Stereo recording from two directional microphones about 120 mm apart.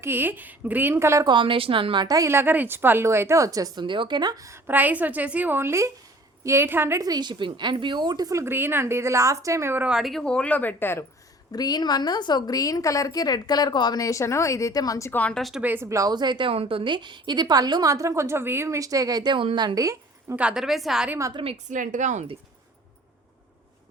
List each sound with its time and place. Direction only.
0.0 s speech: 15° right (ahead or behind)
1.3 s a woman's voice: 45° right (ahead or behind)
2.0 s a woman's voice: 25° right (ahead or behind)
7.1 s a woman's voice: 40° right (ahead or behind); by 9.9 s 20° right (ahead or behind)
9.9 s speech: centre (ahead or behind); by 11.0 s 15° left (ahead or behind)
11.5 s a woman's voice: 35° left (ahead or behind)
15.2 s a woman's voice: 5° left (ahead or behind)
15.6 s a woman's voice: 20° right (ahead or behind)
20.3 s a woman's voice: 10° right (ahead or behind)
21.7 s speech: 90° right